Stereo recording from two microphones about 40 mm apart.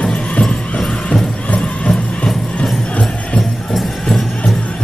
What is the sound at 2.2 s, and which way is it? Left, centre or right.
Music, centre.